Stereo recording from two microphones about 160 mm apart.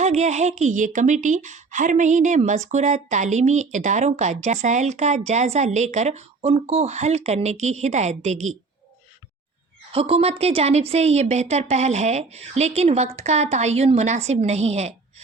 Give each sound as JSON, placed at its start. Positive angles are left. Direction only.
{"t": 0.0, "sound": "speech", "side_deg": -45}
{"t": 9.9, "sound": "speech", "side_deg": -35}